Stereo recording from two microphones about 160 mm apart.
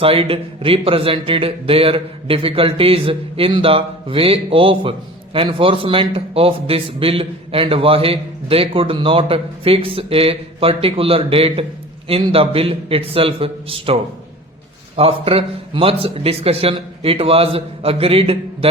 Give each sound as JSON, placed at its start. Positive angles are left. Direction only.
{"t": 0.0, "sound": "speech", "side_deg": -35}